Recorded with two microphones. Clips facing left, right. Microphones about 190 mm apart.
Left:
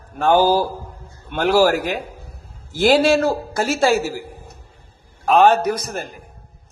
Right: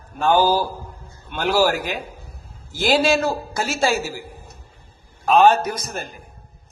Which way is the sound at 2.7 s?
60° left (ahead or behind).